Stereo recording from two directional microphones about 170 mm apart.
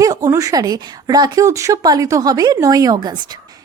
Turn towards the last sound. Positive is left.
turn(degrees=-25)  # may be behind; listen again after turning